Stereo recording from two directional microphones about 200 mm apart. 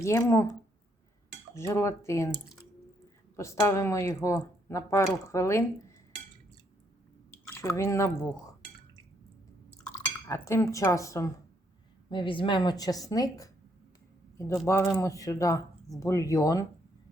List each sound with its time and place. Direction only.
0.0 s speech: 15° left (ahead or behind)
1.5 s speech: 15° left (ahead or behind)
3.3 s speech: 15° left (ahead or behind)
7.5 s speech: 15° left (ahead or behind)
10.2 s a woman's voice: 15° left (ahead or behind)